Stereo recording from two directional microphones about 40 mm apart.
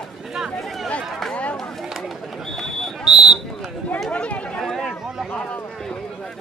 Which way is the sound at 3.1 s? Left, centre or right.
Centre.